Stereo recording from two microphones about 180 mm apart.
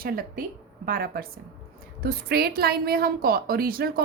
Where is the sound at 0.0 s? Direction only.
55° right (ahead or behind).